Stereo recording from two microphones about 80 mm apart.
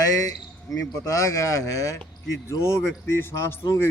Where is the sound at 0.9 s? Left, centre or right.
Left.